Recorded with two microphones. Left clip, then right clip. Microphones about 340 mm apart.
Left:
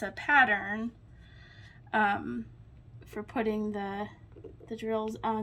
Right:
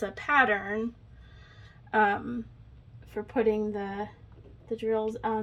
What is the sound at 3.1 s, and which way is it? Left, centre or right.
A woman's voice, centre.